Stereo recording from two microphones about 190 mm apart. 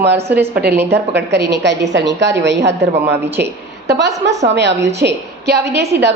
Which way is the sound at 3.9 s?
65° right (ahead or behind).